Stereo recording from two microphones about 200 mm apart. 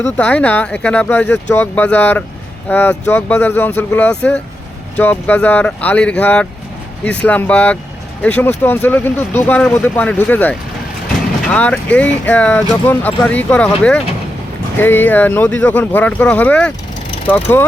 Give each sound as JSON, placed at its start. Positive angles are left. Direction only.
{"t": 0.0, "sound": "speech", "side_deg": 5}